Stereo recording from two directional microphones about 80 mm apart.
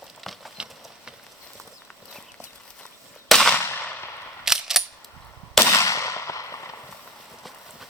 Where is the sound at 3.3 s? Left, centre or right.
Centre.